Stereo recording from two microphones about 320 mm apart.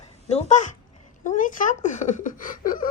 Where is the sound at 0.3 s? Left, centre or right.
Left.